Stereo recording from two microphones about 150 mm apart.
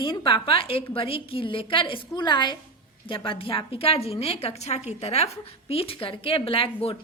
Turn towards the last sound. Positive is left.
turn(degrees=40)  # may be behind; listen again after turning